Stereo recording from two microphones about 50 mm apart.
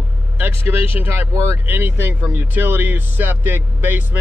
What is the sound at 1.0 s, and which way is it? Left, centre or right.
Speech, right.